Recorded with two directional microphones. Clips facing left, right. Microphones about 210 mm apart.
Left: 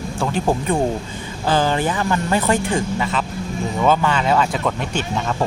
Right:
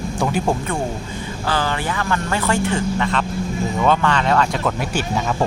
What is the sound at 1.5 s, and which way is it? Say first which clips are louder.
Speech: left 4 dB; 20° left (ahead or behind).